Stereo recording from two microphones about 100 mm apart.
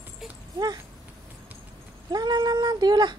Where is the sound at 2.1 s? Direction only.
45° right (ahead or behind).